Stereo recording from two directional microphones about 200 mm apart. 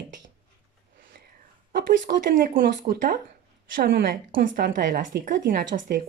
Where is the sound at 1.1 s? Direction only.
50° right (ahead or behind).